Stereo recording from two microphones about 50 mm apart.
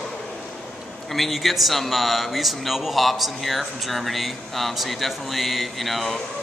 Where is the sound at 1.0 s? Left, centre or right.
Centre.